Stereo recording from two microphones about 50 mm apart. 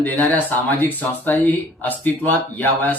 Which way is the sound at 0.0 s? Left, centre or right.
Left.